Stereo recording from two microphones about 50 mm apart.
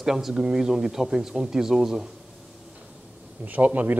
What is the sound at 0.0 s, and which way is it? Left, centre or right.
Speech, centre.